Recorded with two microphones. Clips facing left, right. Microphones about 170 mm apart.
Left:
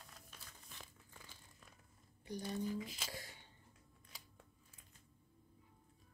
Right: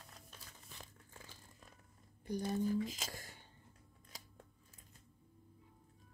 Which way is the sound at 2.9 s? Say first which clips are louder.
Right 1 dB; 45° right (ahead or behind).